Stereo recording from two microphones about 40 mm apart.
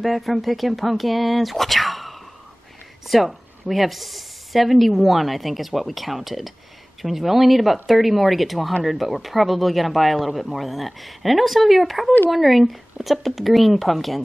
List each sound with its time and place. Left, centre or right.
0.0 s a woman's voice: centre